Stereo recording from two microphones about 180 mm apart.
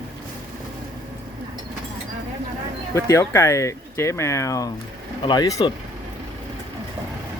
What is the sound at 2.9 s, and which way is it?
Speech, 15° left (ahead or behind).